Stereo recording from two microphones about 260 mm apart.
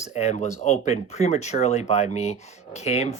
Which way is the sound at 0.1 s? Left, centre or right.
Left.